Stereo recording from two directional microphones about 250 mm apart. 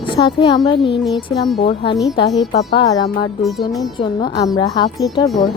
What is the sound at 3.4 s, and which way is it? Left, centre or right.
Speech, centre.